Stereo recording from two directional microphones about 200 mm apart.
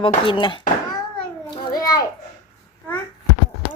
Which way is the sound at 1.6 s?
20° left (ahead or behind).